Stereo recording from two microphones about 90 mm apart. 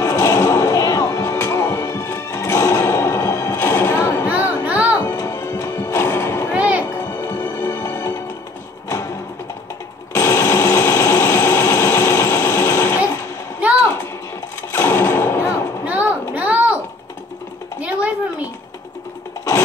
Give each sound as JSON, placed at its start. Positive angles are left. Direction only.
{"t": 0.0, "sound": "music", "side_deg": 30}
{"t": 4.6, "sound": "music", "side_deg": -15}
{"t": 5.0, "sound": "music", "side_deg": 30}
{"t": 6.5, "sound": "music", "side_deg": -15}
{"t": 7.0, "sound": "music", "side_deg": 30}
{"t": 10.1, "sound": "a sound", "side_deg": 30}
{"t": 14.7, "sound": "gunshot", "side_deg": 25}
{"t": 15.8, "sound": "a sound", "side_deg": -15}